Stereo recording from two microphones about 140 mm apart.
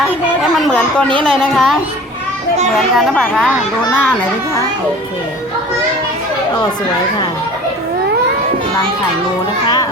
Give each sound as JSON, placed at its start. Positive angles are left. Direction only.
{"t": 0.5, "sound": "speech", "side_deg": 0}
{"t": 2.7, "sound": "speech", "side_deg": 0}